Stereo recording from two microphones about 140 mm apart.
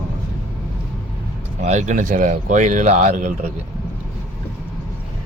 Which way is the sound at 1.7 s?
60° right (ahead or behind).